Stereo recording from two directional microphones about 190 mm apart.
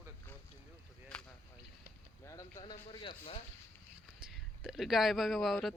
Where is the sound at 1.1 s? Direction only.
5° left (ahead or behind).